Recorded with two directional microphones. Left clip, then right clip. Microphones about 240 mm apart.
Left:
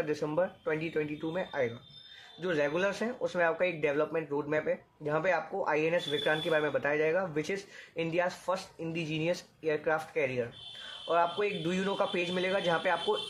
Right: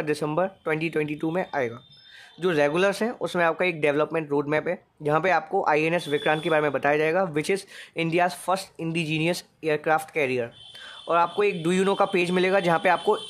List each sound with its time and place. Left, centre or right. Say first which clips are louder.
0.0 s speech: right 6 dB; right